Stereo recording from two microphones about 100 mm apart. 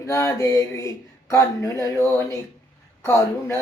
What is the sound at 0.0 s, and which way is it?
Speech, 30° left (ahead or behind).